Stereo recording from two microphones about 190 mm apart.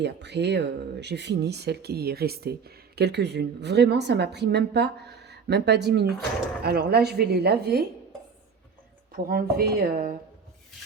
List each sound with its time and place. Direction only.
0.0 s speech: 65° right (ahead or behind)
9.1 s speech: 50° right (ahead or behind)